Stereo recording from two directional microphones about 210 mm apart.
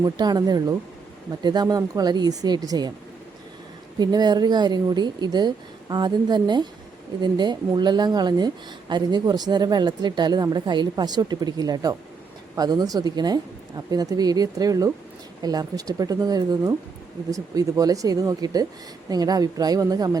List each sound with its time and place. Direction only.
0.0 s a woman's voice: 20° right (ahead or behind)
3.9 s a woman's voice: 20° right (ahead or behind)